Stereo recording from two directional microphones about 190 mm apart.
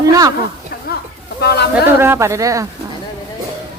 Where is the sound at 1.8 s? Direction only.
10° right (ahead or behind).